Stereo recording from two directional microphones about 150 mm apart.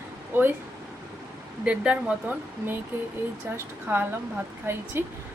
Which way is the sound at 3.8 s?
10° right (ahead or behind).